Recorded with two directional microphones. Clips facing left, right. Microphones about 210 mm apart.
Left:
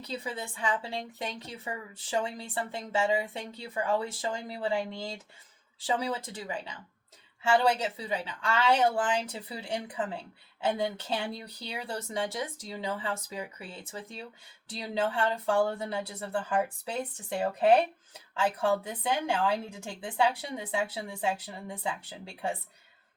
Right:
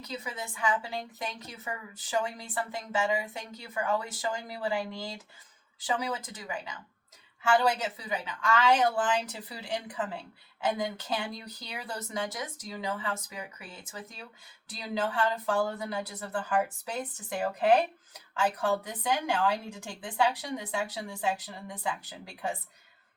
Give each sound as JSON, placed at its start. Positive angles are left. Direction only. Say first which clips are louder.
{"t": 0.0, "sound": "a woman's voice", "louder": "left 2 dB", "side_deg": 30}